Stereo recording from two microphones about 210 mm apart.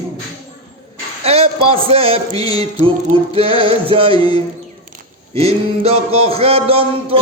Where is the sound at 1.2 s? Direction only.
30° right (ahead or behind).